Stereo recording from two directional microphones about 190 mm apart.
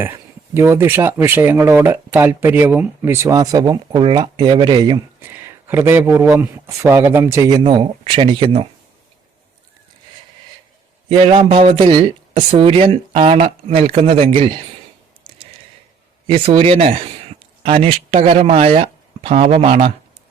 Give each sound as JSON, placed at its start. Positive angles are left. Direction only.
{"t": 0.0, "sound": "speech", "side_deg": -15}
{"t": 5.2, "sound": "speech", "side_deg": -10}
{"t": 11.1, "sound": "speech", "side_deg": -30}
{"t": 16.2, "sound": "speech", "side_deg": -30}